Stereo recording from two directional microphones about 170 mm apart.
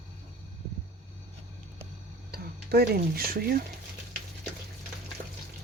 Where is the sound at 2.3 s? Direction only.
65° right (ahead or behind).